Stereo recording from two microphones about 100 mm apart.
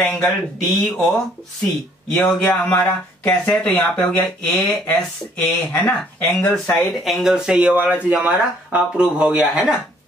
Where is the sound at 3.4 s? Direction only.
10° left (ahead or behind).